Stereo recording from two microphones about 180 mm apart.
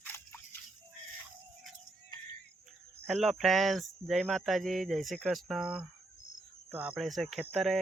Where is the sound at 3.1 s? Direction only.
Centre (ahead or behind).